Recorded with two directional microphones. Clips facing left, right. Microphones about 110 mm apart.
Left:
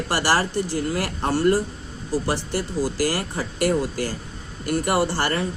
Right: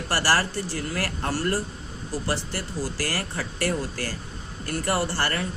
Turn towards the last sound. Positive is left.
turn(degrees=20)  # may be behind; listen again after turning